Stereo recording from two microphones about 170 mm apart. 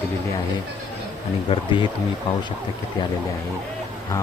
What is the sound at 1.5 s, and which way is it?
Speech, 30° left (ahead or behind).